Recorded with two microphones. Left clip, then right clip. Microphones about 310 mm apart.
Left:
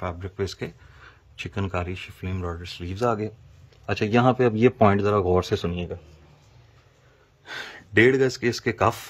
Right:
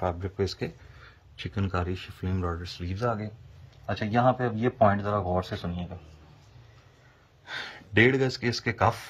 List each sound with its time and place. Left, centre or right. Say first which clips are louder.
0.0 s speech: right 1 dB; centre
2.9 s speech: left 6 dB; left
3.8 s speech: left 3 dB; left
7.4 s speech: left 1 dB; centre